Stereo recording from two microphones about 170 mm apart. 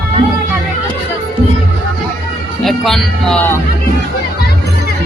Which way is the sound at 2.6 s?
Centre (ahead or behind).